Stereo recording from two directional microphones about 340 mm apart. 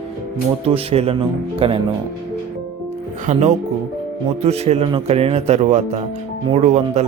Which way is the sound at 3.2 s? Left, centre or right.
Right.